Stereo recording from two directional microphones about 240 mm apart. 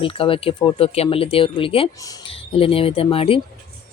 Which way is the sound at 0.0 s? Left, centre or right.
Left.